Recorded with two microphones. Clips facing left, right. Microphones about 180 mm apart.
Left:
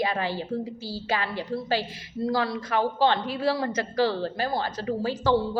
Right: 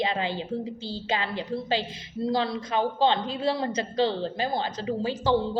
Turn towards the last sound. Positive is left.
turn(degrees=-15)  # may be behind; listen again after turning